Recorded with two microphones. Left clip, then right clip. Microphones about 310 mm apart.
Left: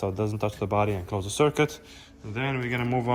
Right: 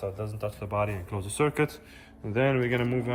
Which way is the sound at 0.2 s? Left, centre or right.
Left.